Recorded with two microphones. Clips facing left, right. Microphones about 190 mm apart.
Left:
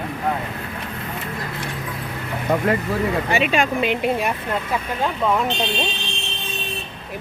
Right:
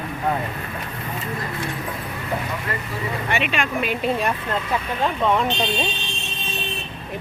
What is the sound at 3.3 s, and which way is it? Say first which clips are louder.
Speech: left 2 dB; 40° left (ahead or behind).